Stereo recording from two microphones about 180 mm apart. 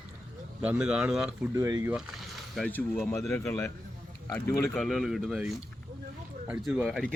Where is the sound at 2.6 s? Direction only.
10° left (ahead or behind).